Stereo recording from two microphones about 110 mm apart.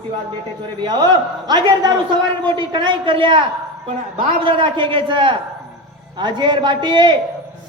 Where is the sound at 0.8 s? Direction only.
40° right (ahead or behind).